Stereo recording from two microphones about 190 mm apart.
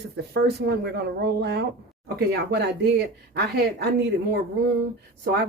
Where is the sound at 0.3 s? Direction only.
60° right (ahead or behind).